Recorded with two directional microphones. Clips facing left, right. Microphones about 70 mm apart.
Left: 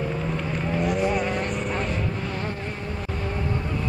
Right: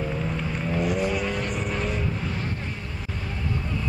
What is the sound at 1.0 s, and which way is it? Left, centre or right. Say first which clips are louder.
Vehicle: left 2 dB; left.